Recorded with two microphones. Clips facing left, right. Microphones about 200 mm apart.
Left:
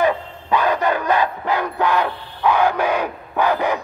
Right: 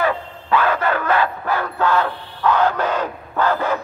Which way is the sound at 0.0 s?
15° left (ahead or behind).